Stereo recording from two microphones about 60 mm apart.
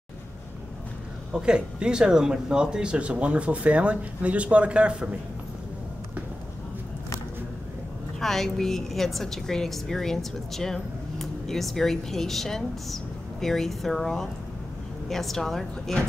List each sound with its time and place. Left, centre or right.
1.3 s speech: centre
8.2 s a woman's voice: centre